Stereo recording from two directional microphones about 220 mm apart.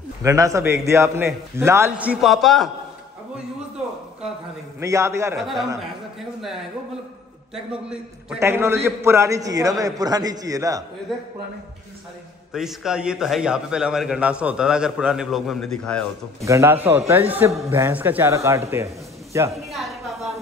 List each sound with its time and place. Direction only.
0.2 s a man's voice: 15° right (ahead or behind)
4.7 s a man's voice: 15° right (ahead or behind)
5.4 s a man's voice: centre (ahead or behind)
7.5 s a man's voice: 5° right (ahead or behind)
11.1 s a man's voice: centre (ahead or behind)
12.5 s a man's voice: centre (ahead or behind)
16.4 s a man's voice: 10° right (ahead or behind)
19.5 s a sound: centre (ahead or behind)